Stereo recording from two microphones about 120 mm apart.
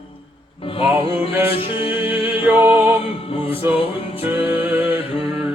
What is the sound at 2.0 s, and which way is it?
Music, 15° right (ahead or behind).